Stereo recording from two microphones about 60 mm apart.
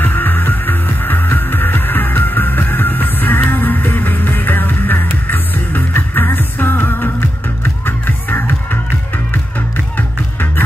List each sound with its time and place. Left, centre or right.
0.0 s music: left